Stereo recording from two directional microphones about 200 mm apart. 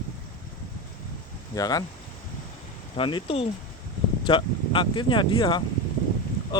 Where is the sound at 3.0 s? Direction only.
25° left (ahead or behind).